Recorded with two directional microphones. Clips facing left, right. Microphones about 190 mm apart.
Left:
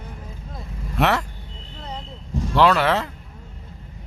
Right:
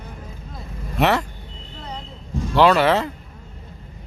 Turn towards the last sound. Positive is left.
turn(degrees=0)  # may be behind; listen again after turning